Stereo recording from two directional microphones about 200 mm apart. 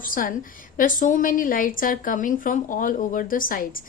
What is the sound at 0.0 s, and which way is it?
A woman's voice, 45° left (ahead or behind).